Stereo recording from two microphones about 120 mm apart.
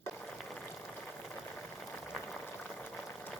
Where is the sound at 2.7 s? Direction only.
15° left (ahead or behind).